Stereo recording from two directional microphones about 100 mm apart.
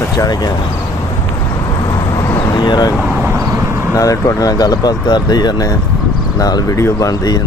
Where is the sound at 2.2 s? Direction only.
30° left (ahead or behind).